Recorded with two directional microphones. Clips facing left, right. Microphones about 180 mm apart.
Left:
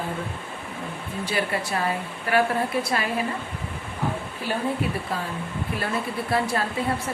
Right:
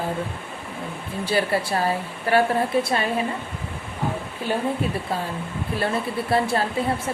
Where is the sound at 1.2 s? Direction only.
30° right (ahead or behind).